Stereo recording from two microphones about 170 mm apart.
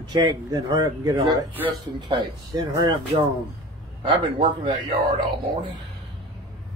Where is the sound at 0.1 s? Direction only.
25° right (ahead or behind).